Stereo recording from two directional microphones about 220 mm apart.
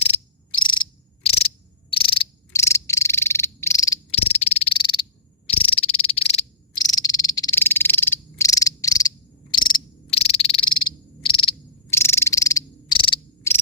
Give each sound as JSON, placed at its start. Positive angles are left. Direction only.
{"t": 0.0, "sound": "cricket", "side_deg": 25}
{"t": 1.9, "sound": "frog", "side_deg": 25}
{"t": 3.9, "sound": "frog", "side_deg": 30}
{"t": 6.8, "sound": "frog", "side_deg": 15}
{"t": 11.9, "sound": "cricket", "side_deg": 10}